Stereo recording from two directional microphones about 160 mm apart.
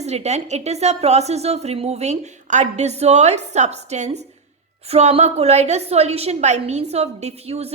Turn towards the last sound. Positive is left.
turn(degrees=-40)  # may be behind; listen again after turning